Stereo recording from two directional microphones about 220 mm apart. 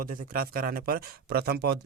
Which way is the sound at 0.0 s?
40° right (ahead or behind).